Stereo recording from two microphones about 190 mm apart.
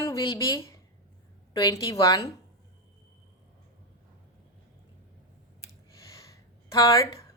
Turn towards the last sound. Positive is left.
turn(degrees=20)  # may be behind; listen again after turning